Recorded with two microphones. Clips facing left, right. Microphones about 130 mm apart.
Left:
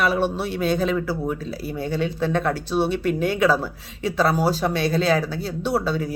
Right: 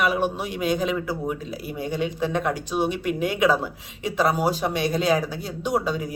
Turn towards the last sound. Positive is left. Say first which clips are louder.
# left 2 dB
turn(degrees=-15)  # may be behind; listen again after turning